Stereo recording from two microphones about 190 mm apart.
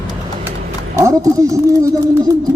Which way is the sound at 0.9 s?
15° right (ahead or behind).